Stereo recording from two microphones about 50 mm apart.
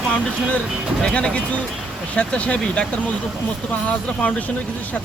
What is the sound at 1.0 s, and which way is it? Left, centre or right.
Speech, centre.